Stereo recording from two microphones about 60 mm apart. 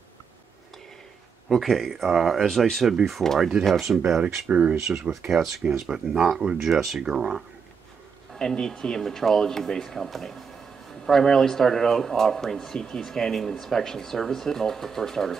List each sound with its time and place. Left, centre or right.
1.5 s speech: centre
4.2 s speech: right
4.8 s speech: centre
8.4 s speech: centre